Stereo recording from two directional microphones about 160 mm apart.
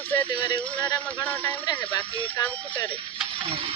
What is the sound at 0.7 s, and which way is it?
Speech, 10° left (ahead or behind).